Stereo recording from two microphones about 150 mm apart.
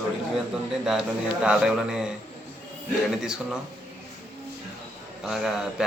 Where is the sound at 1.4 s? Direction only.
5° right (ahead or behind).